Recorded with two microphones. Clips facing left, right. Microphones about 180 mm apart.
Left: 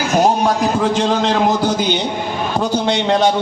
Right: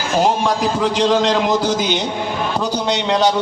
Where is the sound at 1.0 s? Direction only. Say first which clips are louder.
Even; 50° left (ahead or behind).